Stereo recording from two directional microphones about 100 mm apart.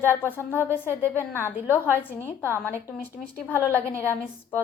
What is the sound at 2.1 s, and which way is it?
A woman's voice, 20° left (ahead or behind).